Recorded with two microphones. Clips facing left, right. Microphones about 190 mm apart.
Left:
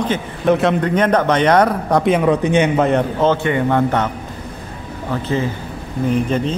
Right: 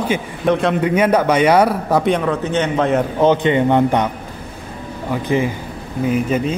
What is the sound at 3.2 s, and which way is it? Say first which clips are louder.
Speech: right 2 dB; 15° right (ahead or behind).